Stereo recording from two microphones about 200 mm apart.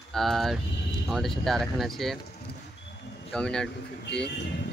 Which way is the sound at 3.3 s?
5° left (ahead or behind).